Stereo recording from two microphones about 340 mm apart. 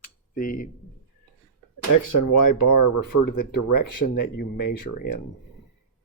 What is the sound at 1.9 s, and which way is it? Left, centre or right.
Speech, left.